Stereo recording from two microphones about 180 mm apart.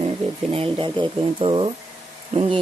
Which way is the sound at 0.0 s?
35° right (ahead or behind).